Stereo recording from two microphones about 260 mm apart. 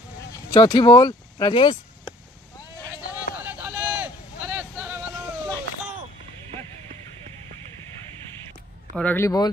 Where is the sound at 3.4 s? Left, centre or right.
Centre.